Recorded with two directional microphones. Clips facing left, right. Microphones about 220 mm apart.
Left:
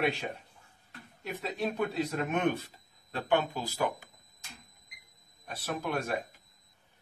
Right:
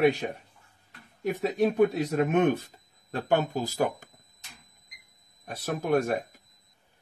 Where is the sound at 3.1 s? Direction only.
45° right (ahead or behind).